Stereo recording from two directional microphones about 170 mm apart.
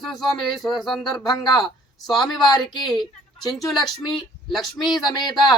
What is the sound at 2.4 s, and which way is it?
Speech, 25° left (ahead or behind).